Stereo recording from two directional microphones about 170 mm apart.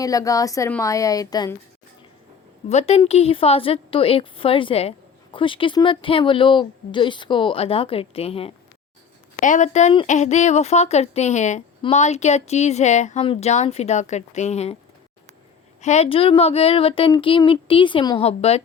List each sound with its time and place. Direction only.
0.0 s speech: 20° left (ahead or behind)
2.6 s a woman's voice: 40° left (ahead or behind)
9.4 s a woman's voice: 45° left (ahead or behind)
15.8 s a woman's voice: 40° left (ahead or behind)
18.2 s a woman's voice: 35° left (ahead or behind)